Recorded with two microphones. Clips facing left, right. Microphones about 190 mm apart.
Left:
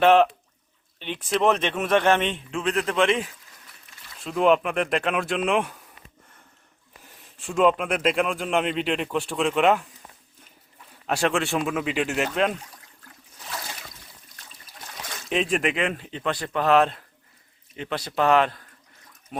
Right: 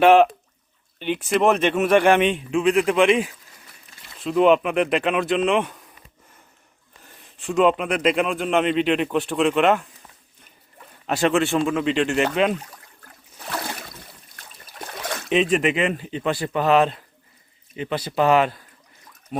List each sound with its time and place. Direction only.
0.0 s speech: 10° right (ahead or behind)
4.2 s speech: centre (ahead or behind)
7.0 s speech: centre (ahead or behind)
11.0 s speech: centre (ahead or behind)
13.5 s a sound: 65° right (ahead or behind)
15.3 s speech: centre (ahead or behind)
19.3 s a sound: centre (ahead or behind)